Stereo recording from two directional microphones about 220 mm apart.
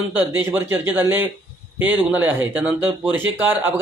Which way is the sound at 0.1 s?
10° right (ahead or behind).